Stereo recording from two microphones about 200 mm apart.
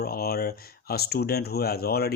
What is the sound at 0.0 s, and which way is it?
Speech, 50° left (ahead or behind).